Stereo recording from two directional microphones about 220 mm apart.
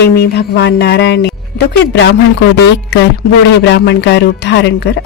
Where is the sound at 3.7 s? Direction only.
50° left (ahead or behind).